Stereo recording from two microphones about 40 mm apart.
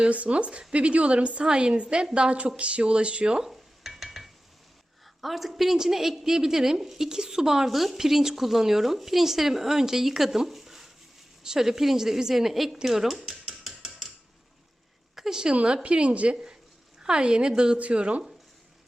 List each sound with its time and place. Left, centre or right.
0.0 s a woman's voice: right
3.4 s stir: centre
5.2 s a woman's voice: centre
13.2 s a sound: centre
15.1 s a sound: centre
15.5 s a woman's voice: right
17.7 s a woman's voice: right